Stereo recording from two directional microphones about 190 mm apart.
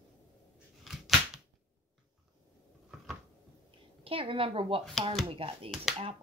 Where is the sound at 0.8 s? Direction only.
Centre (ahead or behind).